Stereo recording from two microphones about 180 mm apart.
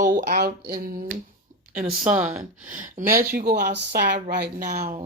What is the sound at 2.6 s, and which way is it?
Speech, 45° right (ahead or behind).